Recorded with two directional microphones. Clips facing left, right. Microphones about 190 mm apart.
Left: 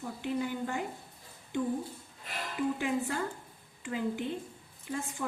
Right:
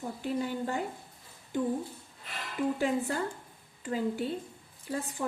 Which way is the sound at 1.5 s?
40° right (ahead or behind).